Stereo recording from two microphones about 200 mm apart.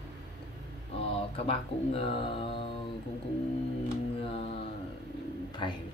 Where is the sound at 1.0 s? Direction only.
30° left (ahead or behind).